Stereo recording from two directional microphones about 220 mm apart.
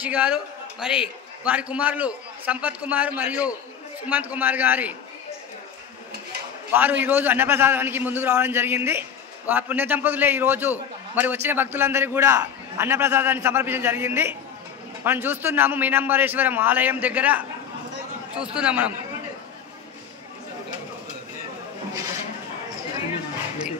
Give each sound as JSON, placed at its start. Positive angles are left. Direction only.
{"t": 0.0, "sound": "a man's voice", "side_deg": -5}
{"t": 6.7, "sound": "a man's voice", "side_deg": -10}